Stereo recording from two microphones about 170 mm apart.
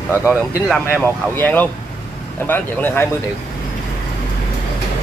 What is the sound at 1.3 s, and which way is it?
Speech, 10° left (ahead or behind).